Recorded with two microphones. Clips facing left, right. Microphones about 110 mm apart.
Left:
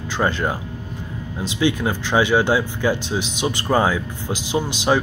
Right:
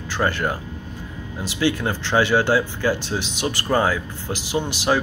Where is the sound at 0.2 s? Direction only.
20° left (ahead or behind).